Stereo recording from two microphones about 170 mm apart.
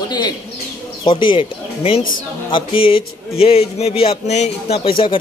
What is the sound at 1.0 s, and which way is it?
Speech, 30° left (ahead or behind).